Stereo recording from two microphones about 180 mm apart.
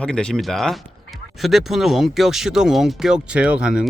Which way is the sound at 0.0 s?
5° left (ahead or behind).